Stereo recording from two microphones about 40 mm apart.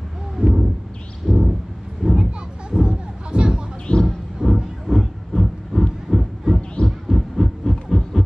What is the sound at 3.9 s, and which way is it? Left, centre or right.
Roaring cats, left.